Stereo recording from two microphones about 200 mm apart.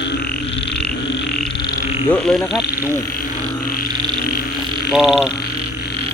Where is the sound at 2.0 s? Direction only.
5° left (ahead or behind).